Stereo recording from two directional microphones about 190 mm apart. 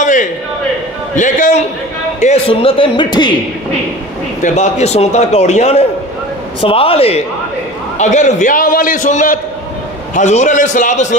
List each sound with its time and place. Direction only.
0.0 s a sound: 40° left (ahead or behind)
1.1 s a man's voice: 40° left (ahead or behind); by 3.3 s 25° left (ahead or behind)
4.4 s a man's voice: 35° left (ahead or behind)